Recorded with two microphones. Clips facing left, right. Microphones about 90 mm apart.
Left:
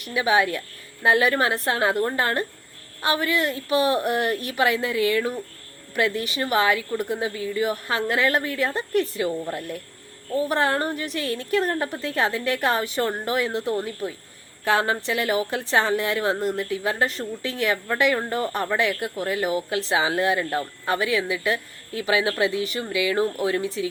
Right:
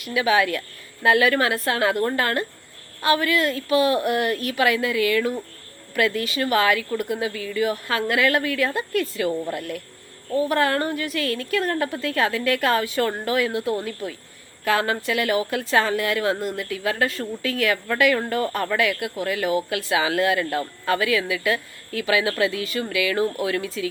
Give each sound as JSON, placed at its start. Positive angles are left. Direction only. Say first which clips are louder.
{"t": 0.1, "sound": "a woman's voice", "louder": "right 1 dB", "side_deg": 30}